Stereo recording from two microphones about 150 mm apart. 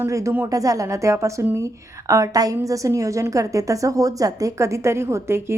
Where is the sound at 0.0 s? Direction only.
20° right (ahead or behind).